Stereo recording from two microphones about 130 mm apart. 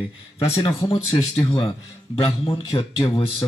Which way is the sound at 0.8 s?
35° left (ahead or behind).